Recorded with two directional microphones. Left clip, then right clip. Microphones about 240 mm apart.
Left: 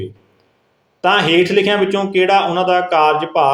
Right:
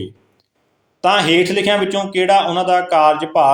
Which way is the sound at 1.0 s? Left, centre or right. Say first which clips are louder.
Left 1 dB; centre.